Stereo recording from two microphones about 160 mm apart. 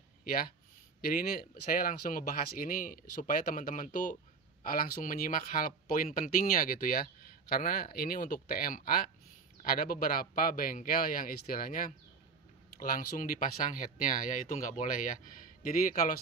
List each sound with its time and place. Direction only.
0.2 s speech: 60° left (ahead or behind)